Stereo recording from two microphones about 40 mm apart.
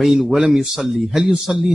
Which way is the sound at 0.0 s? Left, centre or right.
Centre.